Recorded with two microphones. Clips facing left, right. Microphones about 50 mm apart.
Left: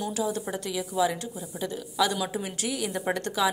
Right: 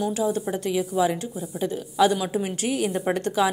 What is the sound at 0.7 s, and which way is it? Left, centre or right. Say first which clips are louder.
A woman's voice: right 4 dB; right.